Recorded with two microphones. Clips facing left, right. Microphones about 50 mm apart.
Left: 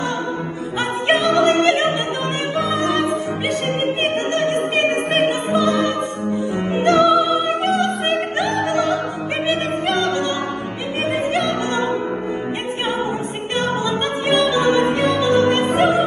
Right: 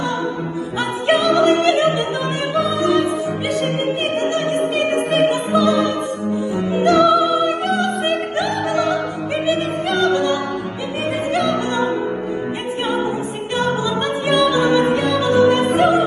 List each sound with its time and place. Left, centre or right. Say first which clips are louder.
0.7 s opera: even; left
2.5 s music: right 3 dB; left
4.3 s opera: even; left
11.3 s music: right 1 dB; left
13.6 s music: right 1 dB; left